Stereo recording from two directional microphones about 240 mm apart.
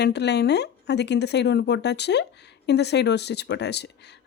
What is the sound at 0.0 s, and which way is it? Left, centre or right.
Speech, left.